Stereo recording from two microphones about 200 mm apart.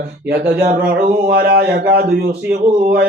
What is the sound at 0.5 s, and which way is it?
Music, 50° right (ahead or behind).